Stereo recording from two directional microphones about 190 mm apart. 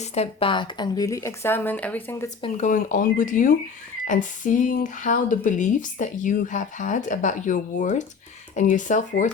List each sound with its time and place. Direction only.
0.0 s speech: 35° left (ahead or behind); by 2.3 s 10° left (ahead or behind)
2.6 s speech: 45° left (ahead or behind)